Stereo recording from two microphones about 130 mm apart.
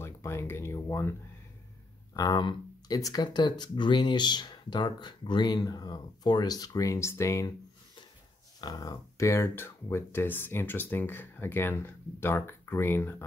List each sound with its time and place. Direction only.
0.0 s a sound: 20° left (ahead or behind)
2.1 s speech: 30° left (ahead or behind)
8.5 s speech: 30° left (ahead or behind)